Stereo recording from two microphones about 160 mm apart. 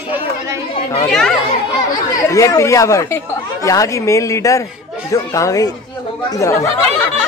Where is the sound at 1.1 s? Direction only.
5° left (ahead or behind).